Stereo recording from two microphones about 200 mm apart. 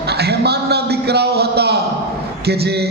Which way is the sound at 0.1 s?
55° right (ahead or behind).